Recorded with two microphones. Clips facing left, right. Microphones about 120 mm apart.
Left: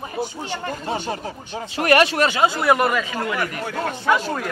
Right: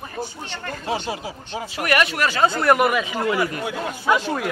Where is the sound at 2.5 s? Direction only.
5° left (ahead or behind).